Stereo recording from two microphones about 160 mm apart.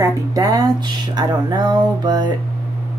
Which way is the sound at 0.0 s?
20° right (ahead or behind).